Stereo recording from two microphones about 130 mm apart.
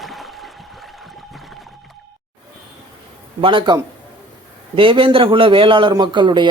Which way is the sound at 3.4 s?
40° right (ahead or behind).